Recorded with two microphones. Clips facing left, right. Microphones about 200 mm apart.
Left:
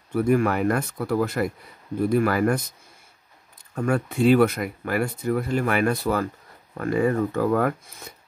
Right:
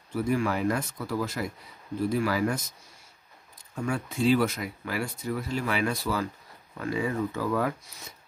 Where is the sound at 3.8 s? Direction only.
60° left (ahead or behind).